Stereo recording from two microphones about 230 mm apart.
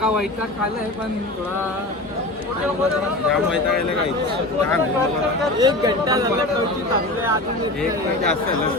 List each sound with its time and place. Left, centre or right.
5.5 s speech: centre